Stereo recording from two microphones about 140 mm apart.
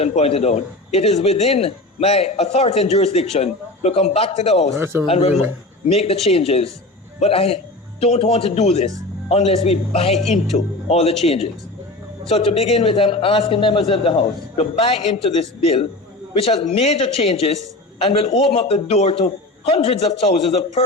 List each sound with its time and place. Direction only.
0.0 s a man's voice: 45° left (ahead or behind)
4.8 s speech: 15° right (ahead or behind)
5.0 s a man's voice: 45° left (ahead or behind)